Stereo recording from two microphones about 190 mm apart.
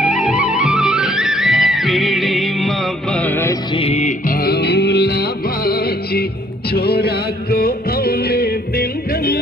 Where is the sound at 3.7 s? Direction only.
35° left (ahead or behind).